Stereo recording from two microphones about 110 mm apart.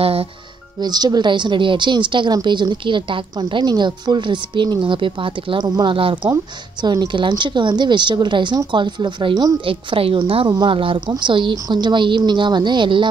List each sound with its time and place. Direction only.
0.0 s speech: 60° right (ahead or behind)
0.7 s a woman's voice: 40° right (ahead or behind)
6.8 s a woman's voice: 40° right (ahead or behind)